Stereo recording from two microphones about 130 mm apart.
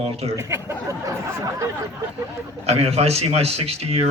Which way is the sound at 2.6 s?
55° right (ahead or behind).